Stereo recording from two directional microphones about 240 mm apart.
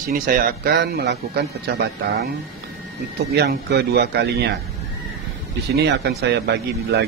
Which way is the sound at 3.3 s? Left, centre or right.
Right.